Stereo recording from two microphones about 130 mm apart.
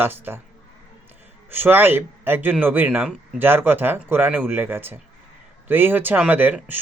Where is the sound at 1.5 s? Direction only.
15° right (ahead or behind).